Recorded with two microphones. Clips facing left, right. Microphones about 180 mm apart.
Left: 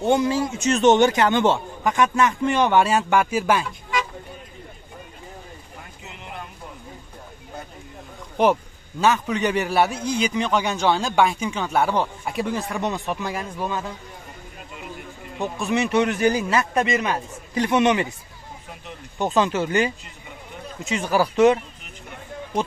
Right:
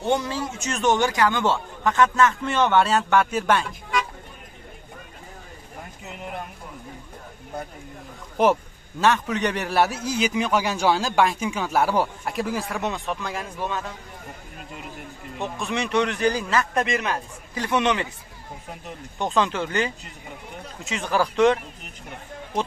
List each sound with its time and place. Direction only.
0.0 s a man's voice: 15° left (ahead or behind)
6.1 s a sound: 50° right (ahead or behind)
8.4 s speech: centre (ahead or behind)
15.3 s a man's voice: 5° left (ahead or behind)
19.1 s a man's voice: 5° left (ahead or behind)